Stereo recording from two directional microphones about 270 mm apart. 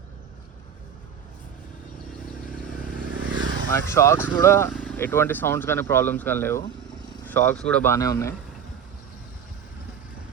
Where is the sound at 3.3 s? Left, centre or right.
Right.